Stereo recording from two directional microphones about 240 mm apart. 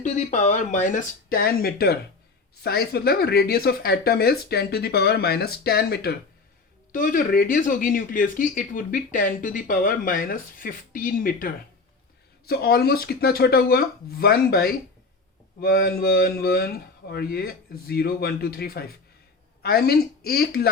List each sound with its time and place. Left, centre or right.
0.0 s speech: left